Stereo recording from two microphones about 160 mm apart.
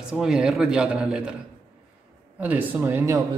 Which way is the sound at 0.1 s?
5° right (ahead or behind).